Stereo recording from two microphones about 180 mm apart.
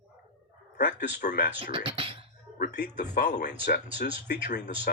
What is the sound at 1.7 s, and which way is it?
Beatboxing, 30° right (ahead or behind).